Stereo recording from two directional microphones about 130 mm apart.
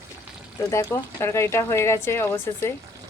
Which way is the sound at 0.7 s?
20° left (ahead or behind).